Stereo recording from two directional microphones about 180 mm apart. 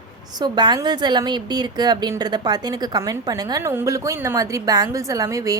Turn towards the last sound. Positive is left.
turn(degrees=-20)  # may be behind; listen again after turning